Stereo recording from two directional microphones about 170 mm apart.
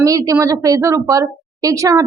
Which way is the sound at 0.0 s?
20° right (ahead or behind).